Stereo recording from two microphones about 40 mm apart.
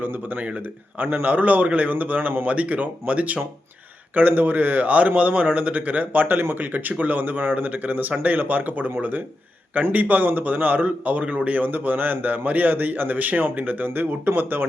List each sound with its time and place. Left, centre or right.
0.0 s a man's voice: right
0.4 s a man's voice: right